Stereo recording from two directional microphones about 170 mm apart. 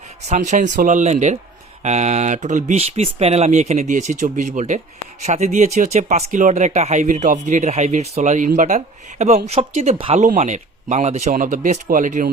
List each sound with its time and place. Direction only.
0.3 s speech: 45° right (ahead or behind)